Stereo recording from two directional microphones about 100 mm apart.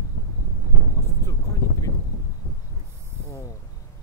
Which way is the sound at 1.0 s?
30° left (ahead or behind).